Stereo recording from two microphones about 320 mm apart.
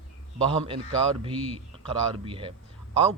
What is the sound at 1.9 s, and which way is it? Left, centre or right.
Speech, centre.